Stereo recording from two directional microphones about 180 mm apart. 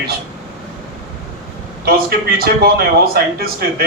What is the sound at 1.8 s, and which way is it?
A man's voice, 60° right (ahead or behind).